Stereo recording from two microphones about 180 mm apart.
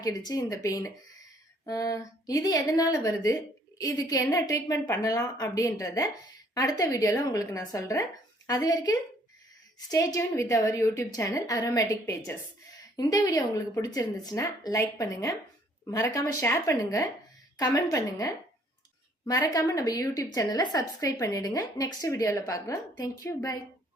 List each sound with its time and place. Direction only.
0.0 s a woman's voice: 20° left (ahead or behind)